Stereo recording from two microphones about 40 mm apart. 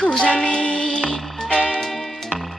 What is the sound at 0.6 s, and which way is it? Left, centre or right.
Music, centre.